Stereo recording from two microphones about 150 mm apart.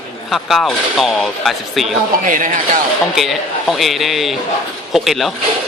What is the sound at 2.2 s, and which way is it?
Speech, 60° right (ahead or behind).